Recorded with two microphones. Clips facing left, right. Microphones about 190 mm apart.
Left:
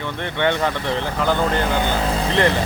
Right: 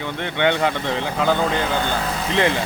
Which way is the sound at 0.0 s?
15° right (ahead or behind).